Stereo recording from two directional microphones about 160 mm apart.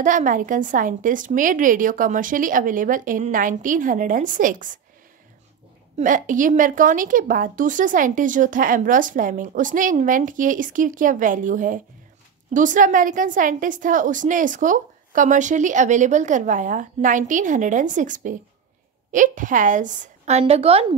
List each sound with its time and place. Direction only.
0.0 s a woman's voice: 55° right (ahead or behind)
5.9 s a woman's voice: 55° right (ahead or behind)